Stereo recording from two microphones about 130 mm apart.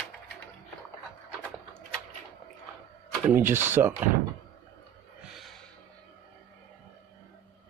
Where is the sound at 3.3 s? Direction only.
15° right (ahead or behind).